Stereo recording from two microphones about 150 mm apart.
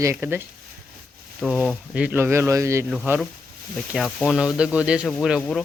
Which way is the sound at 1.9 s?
10° right (ahead or behind).